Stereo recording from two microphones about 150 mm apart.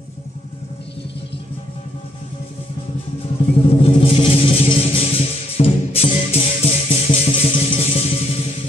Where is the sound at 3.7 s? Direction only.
40° left (ahead or behind).